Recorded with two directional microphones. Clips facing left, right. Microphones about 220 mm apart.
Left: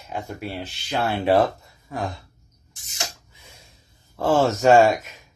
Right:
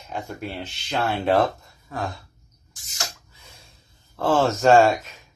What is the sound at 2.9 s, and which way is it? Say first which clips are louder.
Rub: left 1 dB; 20° left (ahead or behind).